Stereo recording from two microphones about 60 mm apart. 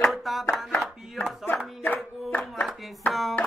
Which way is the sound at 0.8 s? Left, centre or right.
Centre.